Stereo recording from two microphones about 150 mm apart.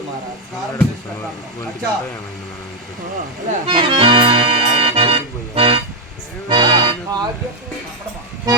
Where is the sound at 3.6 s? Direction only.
35° right (ahead or behind).